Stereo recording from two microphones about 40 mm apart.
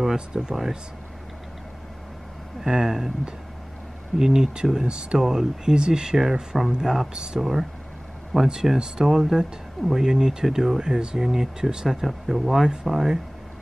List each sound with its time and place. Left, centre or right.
0.3 s speech: centre
2.6 s speech: centre
4.2 s speech: centre
8.7 s speech: centre